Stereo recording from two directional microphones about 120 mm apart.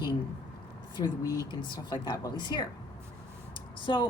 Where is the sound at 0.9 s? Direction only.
35° left (ahead or behind).